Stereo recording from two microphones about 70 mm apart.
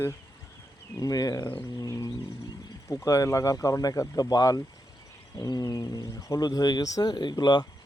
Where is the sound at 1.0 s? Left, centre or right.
Left.